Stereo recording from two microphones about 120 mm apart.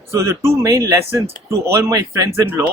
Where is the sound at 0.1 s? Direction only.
25° right (ahead or behind).